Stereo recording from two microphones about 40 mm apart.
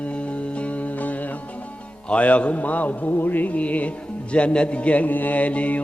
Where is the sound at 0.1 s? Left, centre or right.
Left.